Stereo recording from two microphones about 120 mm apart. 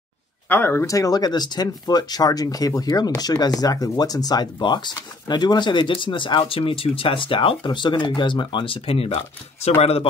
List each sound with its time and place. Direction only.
0.5 s speech: 20° left (ahead or behind); by 10.0 s 55° left (ahead or behind)